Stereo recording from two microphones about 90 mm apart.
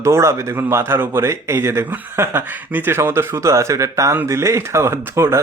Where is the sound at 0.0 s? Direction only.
30° right (ahead or behind).